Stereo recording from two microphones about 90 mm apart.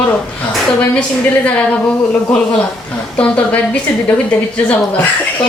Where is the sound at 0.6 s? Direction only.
10° left (ahead or behind).